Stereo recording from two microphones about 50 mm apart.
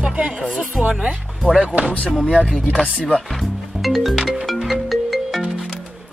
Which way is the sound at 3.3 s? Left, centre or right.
Centre.